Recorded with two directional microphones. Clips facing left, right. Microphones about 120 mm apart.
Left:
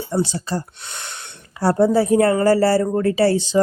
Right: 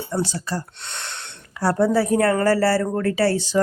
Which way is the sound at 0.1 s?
20° left (ahead or behind).